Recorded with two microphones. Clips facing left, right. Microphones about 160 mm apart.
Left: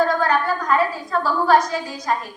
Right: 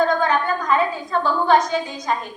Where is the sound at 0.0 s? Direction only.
5° left (ahead or behind).